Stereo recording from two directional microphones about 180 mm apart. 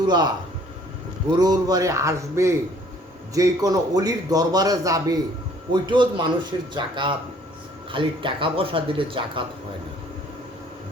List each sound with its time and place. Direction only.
0.0 s a man's voice: 25° right (ahead or behind)
1.4 s a man's voice: 20° right (ahead or behind)